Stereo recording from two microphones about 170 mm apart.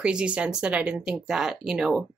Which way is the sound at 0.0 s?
5° right (ahead or behind).